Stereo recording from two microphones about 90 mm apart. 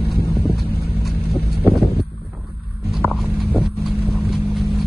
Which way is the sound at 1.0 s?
Centre (ahead or behind).